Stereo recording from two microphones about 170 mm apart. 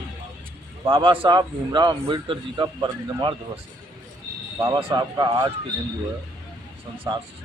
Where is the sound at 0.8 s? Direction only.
30° right (ahead or behind).